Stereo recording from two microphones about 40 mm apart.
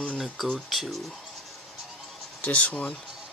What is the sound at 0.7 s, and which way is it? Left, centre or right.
Speech, centre.